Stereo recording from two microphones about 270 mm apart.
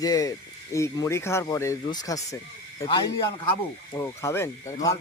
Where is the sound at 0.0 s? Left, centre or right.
Centre.